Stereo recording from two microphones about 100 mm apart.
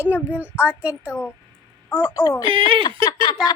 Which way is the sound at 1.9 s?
25° left (ahead or behind).